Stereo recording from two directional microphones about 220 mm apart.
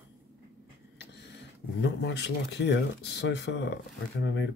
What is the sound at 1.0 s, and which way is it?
Speech, 50° left (ahead or behind).